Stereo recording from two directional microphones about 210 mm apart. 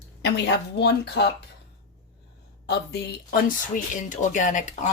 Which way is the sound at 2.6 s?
50° left (ahead or behind).